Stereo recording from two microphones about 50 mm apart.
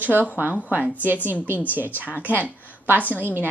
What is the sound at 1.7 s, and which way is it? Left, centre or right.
A woman's voice, right.